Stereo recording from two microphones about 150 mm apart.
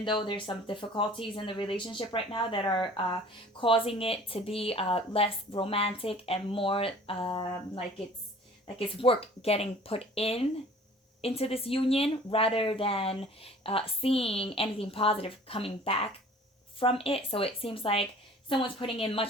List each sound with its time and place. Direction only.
0.0 s speech: 35° left (ahead or behind)
8.6 s speech: 35° left (ahead or behind)